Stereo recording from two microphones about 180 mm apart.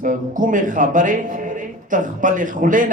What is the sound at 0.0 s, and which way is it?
A man's voice, 50° right (ahead or behind).